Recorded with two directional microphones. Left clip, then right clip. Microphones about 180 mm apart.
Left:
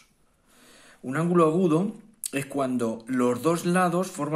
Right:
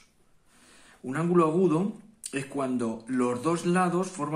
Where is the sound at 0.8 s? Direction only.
30° left (ahead or behind).